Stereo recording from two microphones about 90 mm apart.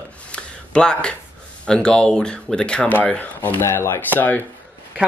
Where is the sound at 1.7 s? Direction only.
10° left (ahead or behind).